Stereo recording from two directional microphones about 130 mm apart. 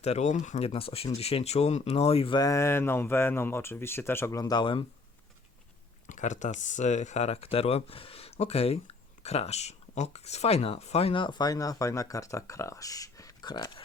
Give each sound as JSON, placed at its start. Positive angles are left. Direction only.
{"t": 0.0, "sound": "speech", "side_deg": 60}
{"t": 0.6, "sound": "speech", "side_deg": 45}
{"t": 2.3, "sound": "speech", "side_deg": 25}
{"t": 6.1, "sound": "speech", "side_deg": 70}